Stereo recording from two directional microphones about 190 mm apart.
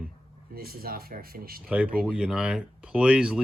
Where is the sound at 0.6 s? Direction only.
50° right (ahead or behind).